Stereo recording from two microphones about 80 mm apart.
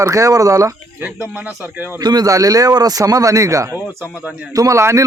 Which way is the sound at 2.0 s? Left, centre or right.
Right.